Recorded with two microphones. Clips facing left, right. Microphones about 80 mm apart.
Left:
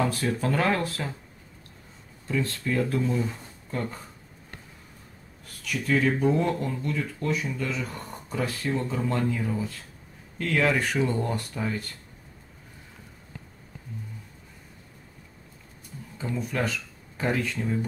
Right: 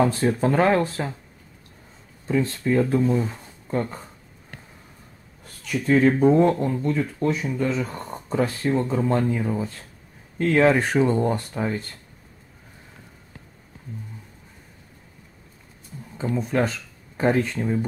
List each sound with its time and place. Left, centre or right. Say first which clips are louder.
0.0 s speech: right 6 dB; right
2.2 s speech: right 6 dB; right
5.6 s speech: right 6 dB; right
16.2 s speech: right 6 dB; right